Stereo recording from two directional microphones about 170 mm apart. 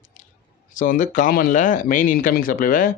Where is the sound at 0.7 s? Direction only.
50° left (ahead or behind).